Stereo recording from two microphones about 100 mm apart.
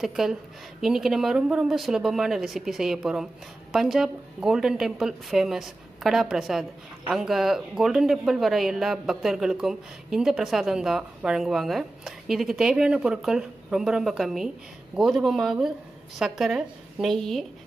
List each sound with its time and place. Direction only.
0.0 s speech: 5° right (ahead or behind)